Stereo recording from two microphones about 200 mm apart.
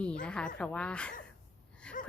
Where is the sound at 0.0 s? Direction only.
5° left (ahead or behind).